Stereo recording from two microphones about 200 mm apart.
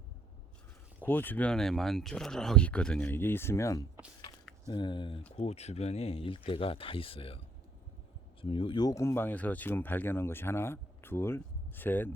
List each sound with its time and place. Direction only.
1.0 s speech: 10° left (ahead or behind)